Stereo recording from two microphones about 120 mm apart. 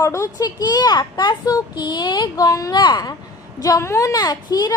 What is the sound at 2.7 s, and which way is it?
A child's voice, 40° left (ahead or behind).